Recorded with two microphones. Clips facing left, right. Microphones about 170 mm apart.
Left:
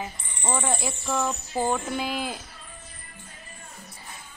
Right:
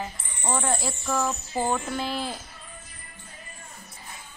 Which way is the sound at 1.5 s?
10° right (ahead or behind).